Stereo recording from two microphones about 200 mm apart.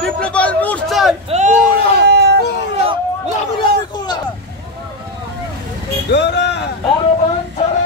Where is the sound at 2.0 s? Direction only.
60° right (ahead or behind).